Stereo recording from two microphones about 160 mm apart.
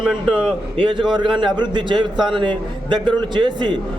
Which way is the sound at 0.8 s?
35° right (ahead or behind).